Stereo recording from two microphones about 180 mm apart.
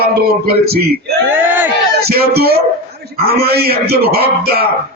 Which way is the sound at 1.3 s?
10° right (ahead or behind).